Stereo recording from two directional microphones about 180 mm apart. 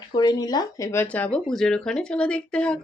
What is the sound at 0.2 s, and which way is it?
Speech, 20° left (ahead or behind).